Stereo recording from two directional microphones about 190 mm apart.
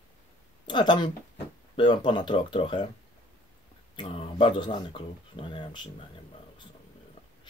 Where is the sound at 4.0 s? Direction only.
30° left (ahead or behind).